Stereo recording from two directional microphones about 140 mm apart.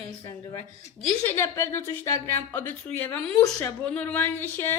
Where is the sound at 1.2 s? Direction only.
20° left (ahead or behind).